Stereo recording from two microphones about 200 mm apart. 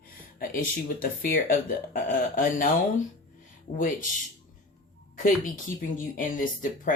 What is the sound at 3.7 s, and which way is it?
Speech, 40° left (ahead or behind).